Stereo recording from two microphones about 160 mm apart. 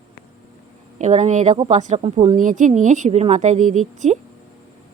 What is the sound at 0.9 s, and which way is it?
Speech, 45° right (ahead or behind).